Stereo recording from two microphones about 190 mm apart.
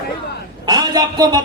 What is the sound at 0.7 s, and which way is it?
Speech, 20° right (ahead or behind).